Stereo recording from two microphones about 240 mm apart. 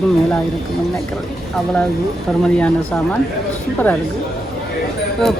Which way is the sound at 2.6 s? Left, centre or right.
Centre.